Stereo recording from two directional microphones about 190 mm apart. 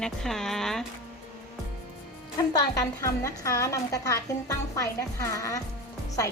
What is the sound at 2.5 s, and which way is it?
A woman's voice, 20° left (ahead or behind).